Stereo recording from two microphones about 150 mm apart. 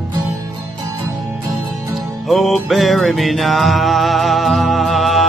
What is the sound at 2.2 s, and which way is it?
Music, centre (ahead or behind).